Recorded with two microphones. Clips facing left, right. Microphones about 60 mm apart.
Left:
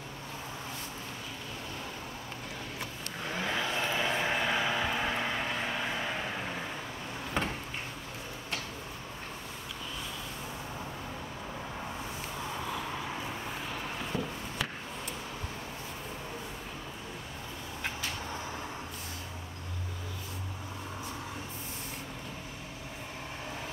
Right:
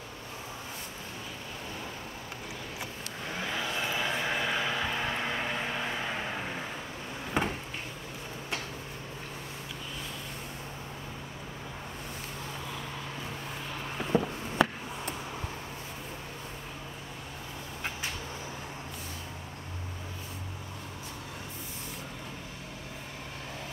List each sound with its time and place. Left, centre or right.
3.3 s vehicle: centre
7.4 s cupboard open or close: centre
14.1 s a sound: right